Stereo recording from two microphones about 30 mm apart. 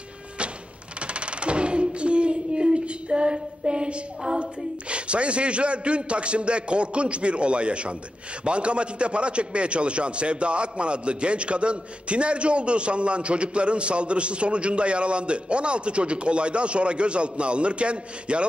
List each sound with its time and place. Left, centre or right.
1.0 s coin: right
8.5 s a man's voice: right